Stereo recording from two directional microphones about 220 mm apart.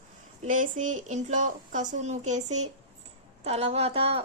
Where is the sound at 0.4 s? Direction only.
35° right (ahead or behind).